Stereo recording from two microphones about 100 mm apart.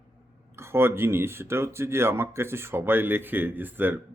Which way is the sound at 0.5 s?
25° right (ahead or behind).